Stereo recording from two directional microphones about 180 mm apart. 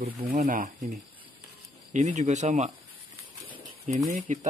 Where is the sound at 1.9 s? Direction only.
40° right (ahead or behind).